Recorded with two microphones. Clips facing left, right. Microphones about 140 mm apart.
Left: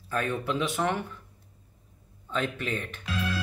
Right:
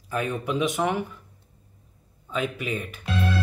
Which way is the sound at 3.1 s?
30° right (ahead or behind).